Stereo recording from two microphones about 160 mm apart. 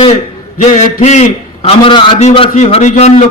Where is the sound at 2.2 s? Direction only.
45° left (ahead or behind).